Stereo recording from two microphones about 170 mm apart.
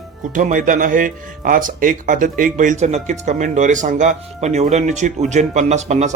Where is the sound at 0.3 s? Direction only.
50° right (ahead or behind).